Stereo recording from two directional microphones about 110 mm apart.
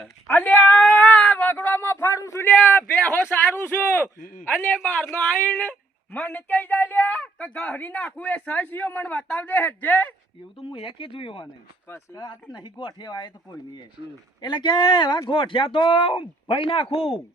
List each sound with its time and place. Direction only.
0.3 s speech: 15° left (ahead or behind)
0.8 s cat: 5° left (ahead or behind)
1.5 s a sound: 20° left (ahead or behind)
2.5 s speech: 15° left (ahead or behind)
10.6 s speech: 55° left (ahead or behind)
11.9 s speech: 25° left (ahead or behind)
12.2 s speech: 40° left (ahead or behind)
14.4 s speech: 40° left (ahead or behind)